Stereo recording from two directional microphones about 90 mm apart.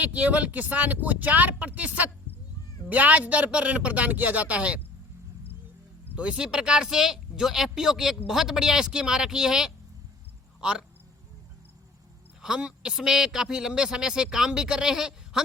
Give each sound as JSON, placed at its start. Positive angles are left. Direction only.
{"t": 0.0, "sound": "a man's voice", "side_deg": -15}
{"t": 6.1, "sound": "a man's voice", "side_deg": -10}
{"t": 12.4, "sound": "a man's voice", "side_deg": -10}